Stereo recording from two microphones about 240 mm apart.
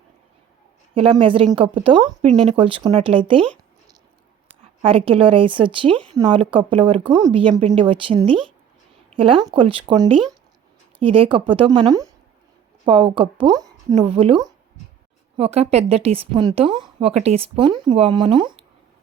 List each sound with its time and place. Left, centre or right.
0.9 s a woman's voice: right
9.0 s a sound: right
9.6 s a woman's voice: right
15.4 s a woman's voice: right